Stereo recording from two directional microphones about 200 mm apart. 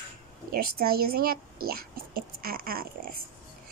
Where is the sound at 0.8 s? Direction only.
50° right (ahead or behind).